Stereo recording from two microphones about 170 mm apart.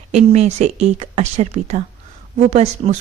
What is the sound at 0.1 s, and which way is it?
A woman's voice, 40° right (ahead or behind).